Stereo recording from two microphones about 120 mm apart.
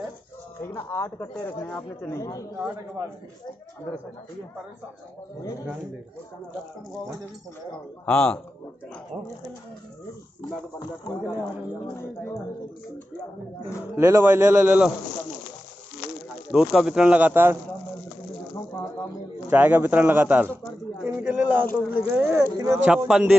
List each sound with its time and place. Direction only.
0.6 s speech: 20° left (ahead or behind)
2.0 s speech: 30° left (ahead or behind)
8.0 s speech: 10° left (ahead or behind)
9.1 s speech: 60° right (ahead or behind)
13.9 s speech: 20° right (ahead or behind)
16.5 s speech: 5° right (ahead or behind)
19.5 s speech: 15° right (ahead or behind)
22.8 s a man's voice: 5° right (ahead or behind)